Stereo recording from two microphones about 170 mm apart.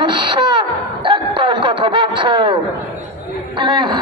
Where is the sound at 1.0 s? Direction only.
30° right (ahead or behind).